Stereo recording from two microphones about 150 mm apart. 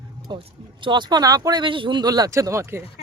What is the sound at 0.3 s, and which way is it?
Speech, 35° right (ahead or behind).